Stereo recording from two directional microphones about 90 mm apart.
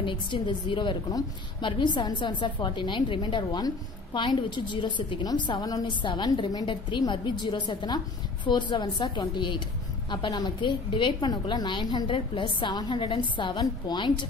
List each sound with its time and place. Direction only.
0.0 s a woman's voice: 65° left (ahead or behind)